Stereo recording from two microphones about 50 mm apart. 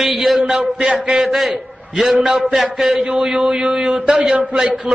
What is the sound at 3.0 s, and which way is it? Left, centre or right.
A man's voice, centre.